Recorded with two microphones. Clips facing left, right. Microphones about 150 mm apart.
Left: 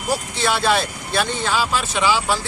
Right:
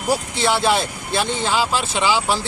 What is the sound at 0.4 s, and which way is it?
Speech, 20° right (ahead or behind).